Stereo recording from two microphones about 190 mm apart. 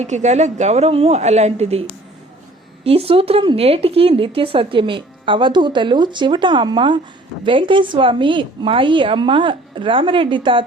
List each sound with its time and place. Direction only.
0.0 s speech: 35° right (ahead or behind)
2.8 s speech: 30° right (ahead or behind)